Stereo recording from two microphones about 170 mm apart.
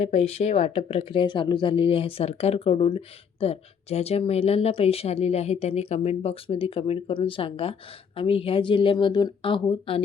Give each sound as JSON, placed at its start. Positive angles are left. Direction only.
{"t": 0.0, "sound": "speech", "side_deg": 40}